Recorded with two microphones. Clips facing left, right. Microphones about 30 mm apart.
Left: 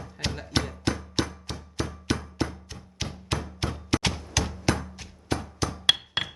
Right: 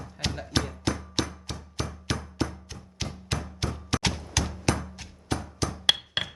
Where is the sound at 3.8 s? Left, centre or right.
Centre.